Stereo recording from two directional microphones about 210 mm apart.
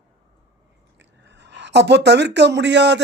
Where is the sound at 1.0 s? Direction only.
55° right (ahead or behind).